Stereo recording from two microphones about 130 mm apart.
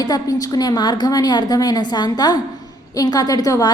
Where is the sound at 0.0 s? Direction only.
30° left (ahead or behind).